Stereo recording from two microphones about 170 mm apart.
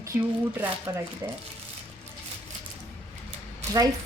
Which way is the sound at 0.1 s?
10° right (ahead or behind).